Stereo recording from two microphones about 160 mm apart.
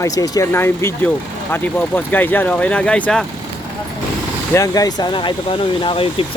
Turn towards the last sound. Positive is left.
turn(degrees=35)  # may be behind; listen again after turning